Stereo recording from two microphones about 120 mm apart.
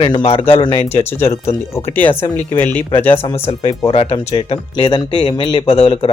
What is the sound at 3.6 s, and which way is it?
Speech, 50° left (ahead or behind).